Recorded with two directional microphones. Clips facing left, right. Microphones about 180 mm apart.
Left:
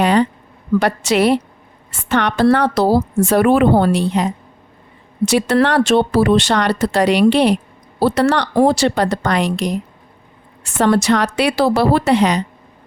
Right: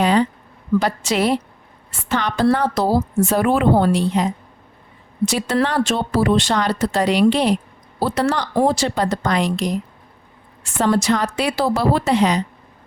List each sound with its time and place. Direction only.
0.0 s a sound: 65° left (ahead or behind)
0.8 s speech: 65° left (ahead or behind)
10.8 s speech: 70° left (ahead or behind)